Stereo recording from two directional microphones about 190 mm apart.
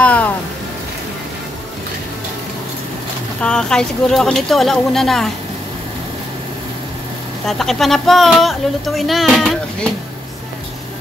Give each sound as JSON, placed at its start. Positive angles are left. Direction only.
{"t": 0.0, "sound": "music", "side_deg": 5}
{"t": 3.4, "sound": "speech", "side_deg": 5}
{"t": 7.4, "sound": "speech", "side_deg": 0}